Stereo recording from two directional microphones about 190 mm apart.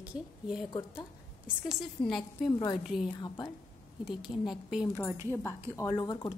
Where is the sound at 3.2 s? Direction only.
20° left (ahead or behind).